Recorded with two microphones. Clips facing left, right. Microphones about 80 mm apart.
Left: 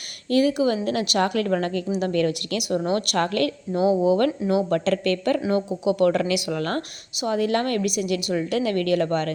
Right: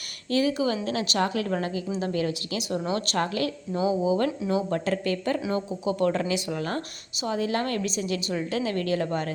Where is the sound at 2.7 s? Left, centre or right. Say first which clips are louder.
Left 5 dB; left.